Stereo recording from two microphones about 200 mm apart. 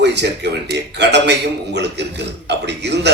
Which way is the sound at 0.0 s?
60° right (ahead or behind).